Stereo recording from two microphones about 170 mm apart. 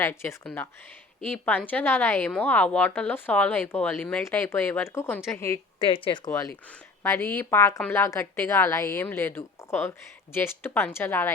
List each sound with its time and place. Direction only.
0.0 s a woman's voice: 15° left (ahead or behind)
5.8 s speech: 30° left (ahead or behind)
6.7 s a woman's voice: 15° left (ahead or behind)